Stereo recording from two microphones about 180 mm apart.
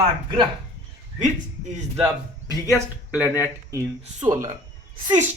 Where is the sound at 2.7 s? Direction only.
10° right (ahead or behind).